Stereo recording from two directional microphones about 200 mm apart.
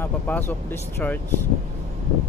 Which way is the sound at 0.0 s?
10° left (ahead or behind).